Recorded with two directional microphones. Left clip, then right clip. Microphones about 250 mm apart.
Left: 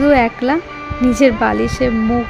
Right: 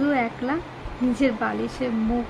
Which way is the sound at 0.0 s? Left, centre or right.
Left.